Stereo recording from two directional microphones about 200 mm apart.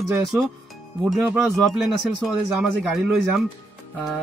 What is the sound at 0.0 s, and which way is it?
Speech, centre (ahead or behind).